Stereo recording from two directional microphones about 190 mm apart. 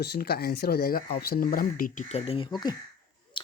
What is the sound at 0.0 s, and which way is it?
Speech, 55° left (ahead or behind).